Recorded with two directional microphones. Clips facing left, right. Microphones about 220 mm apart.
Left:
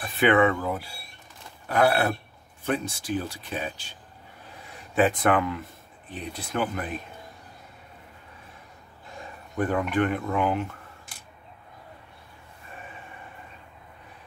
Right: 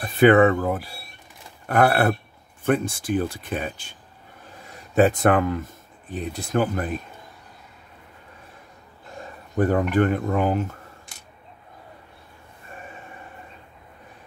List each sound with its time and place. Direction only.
0.0 s speech: 40° right (ahead or behind)
4.9 s speech: 45° right (ahead or behind)
9.6 s speech: 40° right (ahead or behind)